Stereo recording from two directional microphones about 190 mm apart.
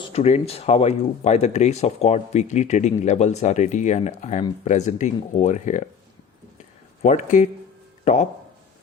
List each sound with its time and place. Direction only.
0.1 s speech: 35° left (ahead or behind)
7.0 s speech: 40° left (ahead or behind)